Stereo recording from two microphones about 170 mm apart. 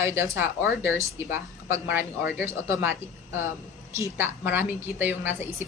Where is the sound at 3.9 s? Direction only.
15° right (ahead or behind).